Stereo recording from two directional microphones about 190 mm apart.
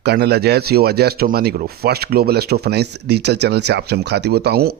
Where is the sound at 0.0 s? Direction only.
60° right (ahead or behind).